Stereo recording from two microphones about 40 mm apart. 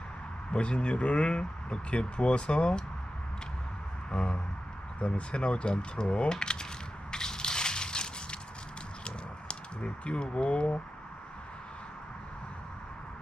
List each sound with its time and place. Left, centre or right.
0.5 s speech: left
4.1 s speech: left
7.1 s a sound: centre